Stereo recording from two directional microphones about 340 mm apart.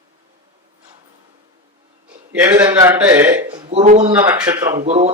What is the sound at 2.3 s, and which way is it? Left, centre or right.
A man's voice, centre.